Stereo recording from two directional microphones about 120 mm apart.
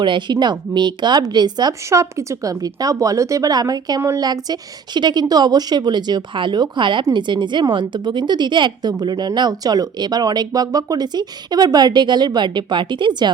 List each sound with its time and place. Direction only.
0.0 s speech: 40° right (ahead or behind)
1.9 s a woman's voice: 25° right (ahead or behind)